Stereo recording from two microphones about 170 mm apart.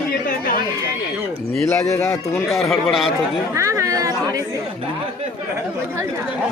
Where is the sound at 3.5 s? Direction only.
15° right (ahead or behind).